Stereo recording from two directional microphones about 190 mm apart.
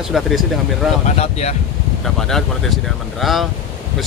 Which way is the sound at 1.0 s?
35° left (ahead or behind).